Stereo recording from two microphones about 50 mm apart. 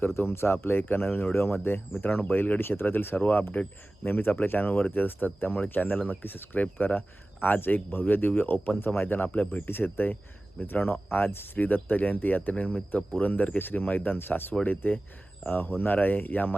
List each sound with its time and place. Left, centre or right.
0.1 s speech: left
2.0 s speech: left
3.2 s speech: left
8.8 s speech: left
9.6 s speech: left